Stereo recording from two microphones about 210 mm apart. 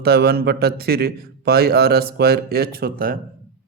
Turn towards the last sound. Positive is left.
turn(degrees=-45)  # may be behind; listen again after turning